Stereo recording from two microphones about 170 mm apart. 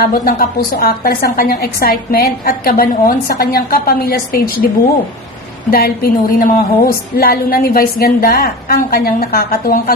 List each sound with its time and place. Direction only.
0.0 s a woman's voice: 60° left (ahead or behind)
5.7 s a woman's voice: 60° left (ahead or behind)